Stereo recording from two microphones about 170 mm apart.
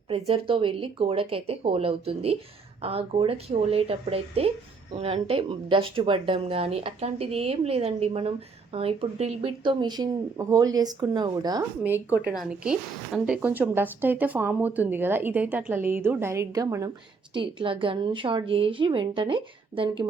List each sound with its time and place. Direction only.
0.1 s speech: 35° right (ahead or behind)
11.8 s speech: 10° right (ahead or behind)
17.3 s speech: 30° right (ahead or behind)